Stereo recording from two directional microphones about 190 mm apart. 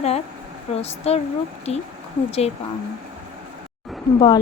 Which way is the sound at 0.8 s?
35° left (ahead or behind).